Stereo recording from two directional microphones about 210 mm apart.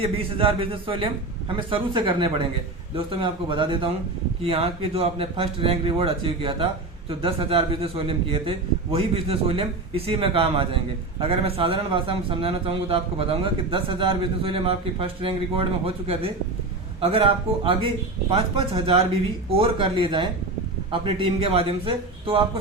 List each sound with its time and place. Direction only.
0.0 s a man's voice: 25° right (ahead or behind)